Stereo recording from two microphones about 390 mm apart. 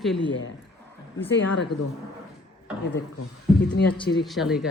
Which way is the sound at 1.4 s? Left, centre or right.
Left.